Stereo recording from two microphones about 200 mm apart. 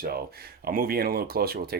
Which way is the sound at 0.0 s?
50° right (ahead or behind).